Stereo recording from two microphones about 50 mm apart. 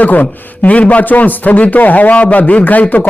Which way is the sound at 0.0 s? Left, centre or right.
Left.